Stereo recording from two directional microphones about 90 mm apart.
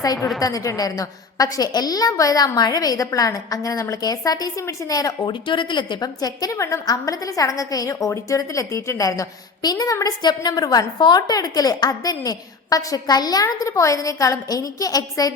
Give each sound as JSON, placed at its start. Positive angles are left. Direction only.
{"t": 0.3, "sound": "a woman's voice", "side_deg": 40}
{"t": 5.2, "sound": "a woman's voice", "side_deg": 65}